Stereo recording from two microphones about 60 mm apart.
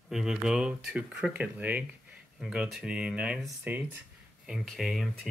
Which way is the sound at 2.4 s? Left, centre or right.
Centre.